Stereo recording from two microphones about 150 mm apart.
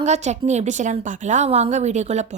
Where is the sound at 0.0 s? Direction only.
50° right (ahead or behind).